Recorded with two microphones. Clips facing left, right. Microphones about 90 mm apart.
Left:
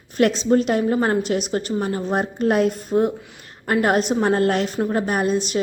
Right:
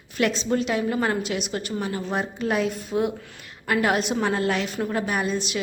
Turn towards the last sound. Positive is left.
turn(degrees=40)  # may be behind; listen again after turning